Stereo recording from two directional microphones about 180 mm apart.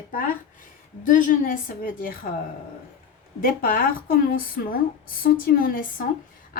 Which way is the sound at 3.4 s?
55° left (ahead or behind).